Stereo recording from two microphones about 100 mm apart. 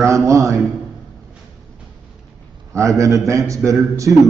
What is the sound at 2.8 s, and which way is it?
A man's voice, 30° right (ahead or behind).